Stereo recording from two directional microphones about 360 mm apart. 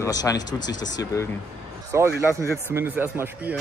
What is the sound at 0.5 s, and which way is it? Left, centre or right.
Speech, left.